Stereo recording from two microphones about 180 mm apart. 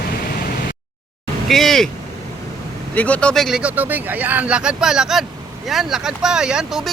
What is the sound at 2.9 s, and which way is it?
A man's voice, 10° left (ahead or behind).